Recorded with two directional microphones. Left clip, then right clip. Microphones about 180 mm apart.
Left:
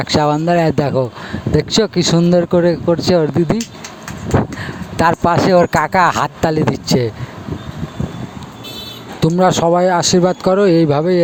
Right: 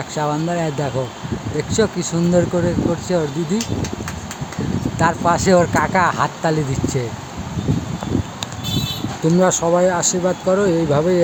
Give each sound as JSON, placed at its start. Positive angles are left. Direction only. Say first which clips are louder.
{"t": 0.0, "sound": "speech", "louder": "left 7 dB", "side_deg": 55}
{"t": 4.9, "sound": "speech", "louder": "left 4 dB", "side_deg": 50}
{"t": 9.4, "sound": "speech", "louder": "left 4 dB", "side_deg": 50}